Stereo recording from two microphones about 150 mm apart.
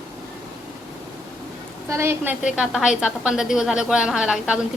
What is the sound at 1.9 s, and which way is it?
Speech, 15° right (ahead or behind).